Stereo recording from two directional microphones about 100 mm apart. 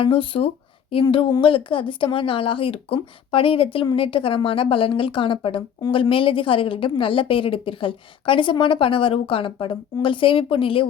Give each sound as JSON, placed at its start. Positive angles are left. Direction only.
{"t": 0.0, "sound": "a woman's voice", "side_deg": 65}